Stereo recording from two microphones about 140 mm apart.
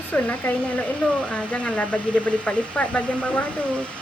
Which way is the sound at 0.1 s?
10° left (ahead or behind).